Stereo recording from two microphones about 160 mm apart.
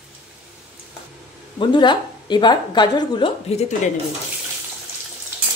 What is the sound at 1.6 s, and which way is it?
A woman's voice, 30° left (ahead or behind).